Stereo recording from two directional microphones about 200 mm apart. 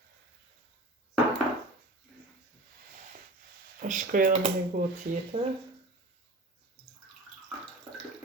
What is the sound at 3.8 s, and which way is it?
Speech, 40° right (ahead or behind).